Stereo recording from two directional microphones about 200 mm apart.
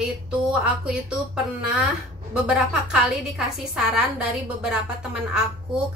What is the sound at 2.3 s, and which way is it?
Speech, 5° right (ahead or behind).